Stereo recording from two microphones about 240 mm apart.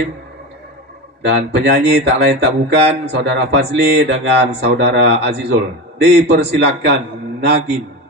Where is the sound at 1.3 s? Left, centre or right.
Right.